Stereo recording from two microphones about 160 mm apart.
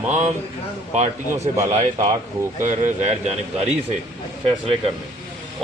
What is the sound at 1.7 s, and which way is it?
Speech, 45° right (ahead or behind).